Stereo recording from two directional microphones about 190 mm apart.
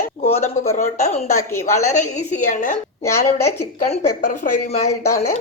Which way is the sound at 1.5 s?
15° left (ahead or behind).